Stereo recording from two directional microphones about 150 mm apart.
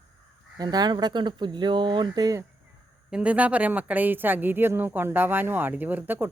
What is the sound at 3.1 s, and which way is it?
Speech, 5° right (ahead or behind).